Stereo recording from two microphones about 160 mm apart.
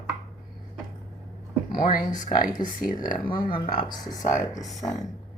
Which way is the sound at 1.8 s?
55° left (ahead or behind).